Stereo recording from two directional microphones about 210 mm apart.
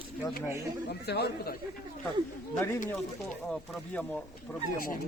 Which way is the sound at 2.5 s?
10° left (ahead or behind).